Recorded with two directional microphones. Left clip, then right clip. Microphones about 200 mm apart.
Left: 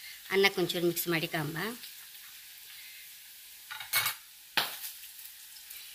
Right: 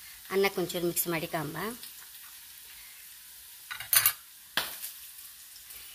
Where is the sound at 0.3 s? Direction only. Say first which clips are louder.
Left 1 dB; 40° right (ahead or behind).